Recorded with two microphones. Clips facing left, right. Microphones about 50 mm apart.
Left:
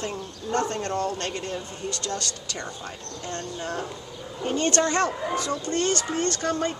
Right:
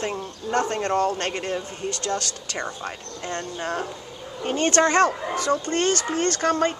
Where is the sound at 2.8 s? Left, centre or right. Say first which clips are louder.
Right 3 dB; right.